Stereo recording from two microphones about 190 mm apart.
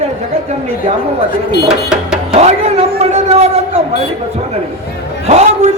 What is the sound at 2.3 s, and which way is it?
Speech, 35° right (ahead or behind).